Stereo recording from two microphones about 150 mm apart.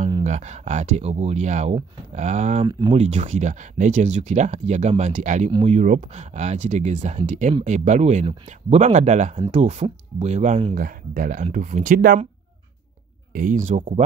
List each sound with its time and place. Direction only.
0.2 s speech: 50° right (ahead or behind)
2.6 s speech: 30° right (ahead or behind)
2.9 s speech: 50° right (ahead or behind)
5.5 s speech: 35° right (ahead or behind)
5.8 s speech: 50° right (ahead or behind)
10.7 s speech: 70° right (ahead or behind)
11.4 s speech: 55° right (ahead or behind); by 12.2 s 90° right
13.3 s speech: 65° right (ahead or behind)